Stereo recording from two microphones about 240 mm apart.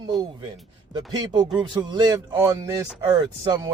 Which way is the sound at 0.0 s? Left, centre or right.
Centre.